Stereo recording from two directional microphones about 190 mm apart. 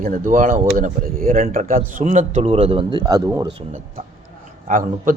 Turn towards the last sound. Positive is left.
turn(degrees=-45)  # may be behind; listen again after turning